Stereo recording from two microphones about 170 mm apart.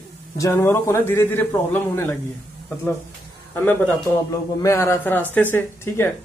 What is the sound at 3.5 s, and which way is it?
Speech, 10° left (ahead or behind).